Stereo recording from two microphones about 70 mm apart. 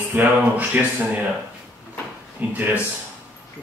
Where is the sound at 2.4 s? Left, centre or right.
Right.